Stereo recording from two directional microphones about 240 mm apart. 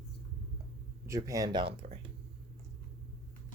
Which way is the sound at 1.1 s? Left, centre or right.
Centre.